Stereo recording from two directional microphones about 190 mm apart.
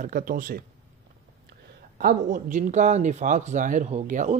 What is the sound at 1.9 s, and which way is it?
Speech, 45° right (ahead or behind).